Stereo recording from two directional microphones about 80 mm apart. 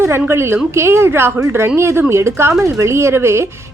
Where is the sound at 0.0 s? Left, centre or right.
Right.